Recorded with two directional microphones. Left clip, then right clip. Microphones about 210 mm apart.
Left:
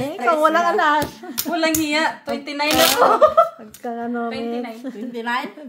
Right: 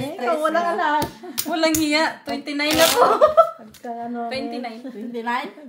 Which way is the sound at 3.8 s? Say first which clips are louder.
Left 4 dB; 40° left (ahead or behind).